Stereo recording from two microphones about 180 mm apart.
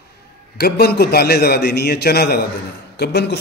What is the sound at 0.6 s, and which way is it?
A man's voice, 60° left (ahead or behind).